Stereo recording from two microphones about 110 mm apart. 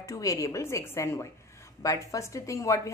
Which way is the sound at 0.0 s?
30° left (ahead or behind).